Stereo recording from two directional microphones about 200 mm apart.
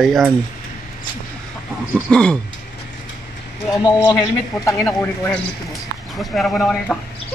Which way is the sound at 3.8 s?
20° left (ahead or behind).